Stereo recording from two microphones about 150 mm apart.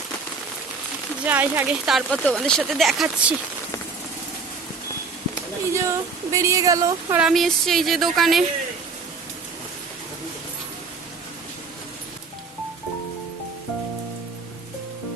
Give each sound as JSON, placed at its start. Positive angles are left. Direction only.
{"t": 1.3, "sound": "speech", "side_deg": -10}
{"t": 2.0, "sound": "a woman's voice", "side_deg": 10}
{"t": 5.7, "sound": "speech", "side_deg": -20}
{"t": 7.2, "sound": "a woman's voice", "side_deg": 0}